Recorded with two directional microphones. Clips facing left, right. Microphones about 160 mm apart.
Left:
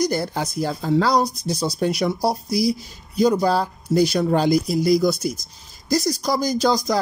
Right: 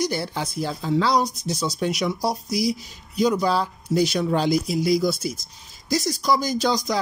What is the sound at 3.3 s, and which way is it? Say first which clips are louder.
Speech: left 3 dB; 45° left (ahead or behind).